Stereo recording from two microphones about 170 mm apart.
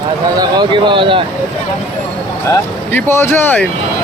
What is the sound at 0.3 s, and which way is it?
Speech, 30° right (ahead or behind).